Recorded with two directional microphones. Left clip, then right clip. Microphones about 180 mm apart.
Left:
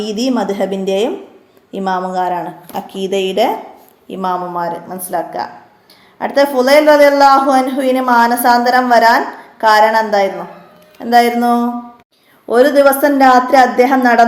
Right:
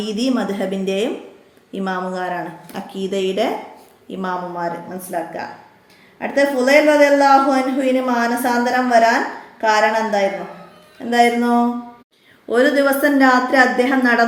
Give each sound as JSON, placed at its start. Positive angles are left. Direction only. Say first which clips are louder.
{"t": 0.0, "sound": "a woman's voice", "louder": "left 4 dB", "side_deg": 15}